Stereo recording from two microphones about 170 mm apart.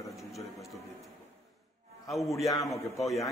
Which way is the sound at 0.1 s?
Centre (ahead or behind).